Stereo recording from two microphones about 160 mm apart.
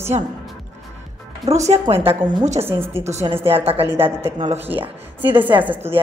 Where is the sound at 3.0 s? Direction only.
45° right (ahead or behind).